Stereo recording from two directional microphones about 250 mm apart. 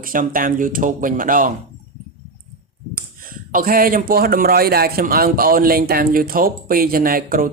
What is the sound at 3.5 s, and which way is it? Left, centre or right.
Speech, right.